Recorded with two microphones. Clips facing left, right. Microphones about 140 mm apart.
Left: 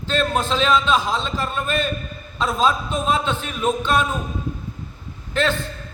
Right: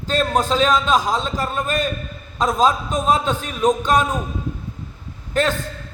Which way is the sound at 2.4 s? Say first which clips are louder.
Right 3 dB; 40° right (ahead or behind).